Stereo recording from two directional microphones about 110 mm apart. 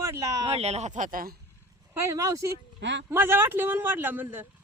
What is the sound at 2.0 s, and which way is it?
Speech, 30° right (ahead or behind).